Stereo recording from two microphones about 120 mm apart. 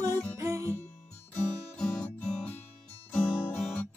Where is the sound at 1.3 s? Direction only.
10° left (ahead or behind).